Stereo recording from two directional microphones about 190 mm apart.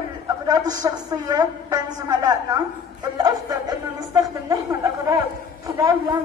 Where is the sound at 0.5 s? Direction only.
20° right (ahead or behind).